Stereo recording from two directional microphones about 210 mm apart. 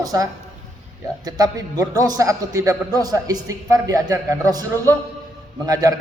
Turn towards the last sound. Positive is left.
turn(degrees=-15)  # may be behind; listen again after turning